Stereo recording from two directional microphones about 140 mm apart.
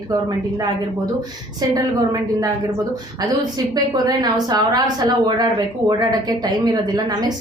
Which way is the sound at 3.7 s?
30° right (ahead or behind).